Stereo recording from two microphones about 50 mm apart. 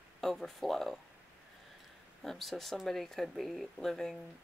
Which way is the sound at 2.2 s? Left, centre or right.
Centre.